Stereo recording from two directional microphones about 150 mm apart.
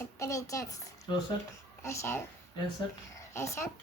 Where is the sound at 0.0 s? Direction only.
20° left (ahead or behind).